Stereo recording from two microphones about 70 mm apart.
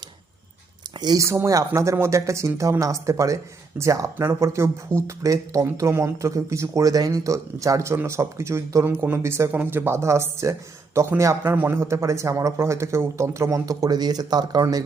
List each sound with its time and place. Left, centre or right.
0.9 s speech: right
1.5 s speech: right
9.5 s speech: right
11.4 s speech: right